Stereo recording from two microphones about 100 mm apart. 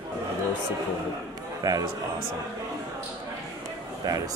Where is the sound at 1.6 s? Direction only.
35° right (ahead or behind).